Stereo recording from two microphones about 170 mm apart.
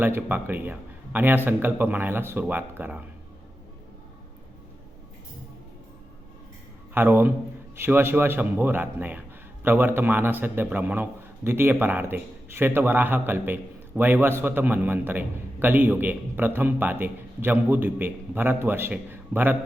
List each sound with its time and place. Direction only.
0.0 s a man's voice: 10° right (ahead or behind)
6.9 s a man's voice: 10° right (ahead or behind)